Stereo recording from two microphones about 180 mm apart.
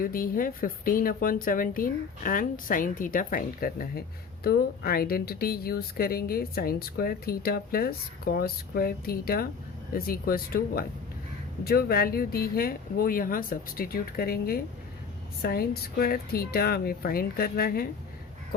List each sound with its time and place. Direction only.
0.0 s a woman's voice: 55° left (ahead or behind)